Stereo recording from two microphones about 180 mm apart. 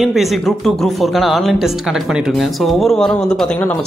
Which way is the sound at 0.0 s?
Centre (ahead or behind).